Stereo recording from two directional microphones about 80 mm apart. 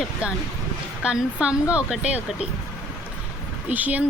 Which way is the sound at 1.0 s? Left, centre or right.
Centre.